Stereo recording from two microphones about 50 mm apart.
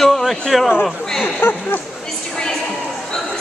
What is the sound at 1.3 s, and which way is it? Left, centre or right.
Speech, left.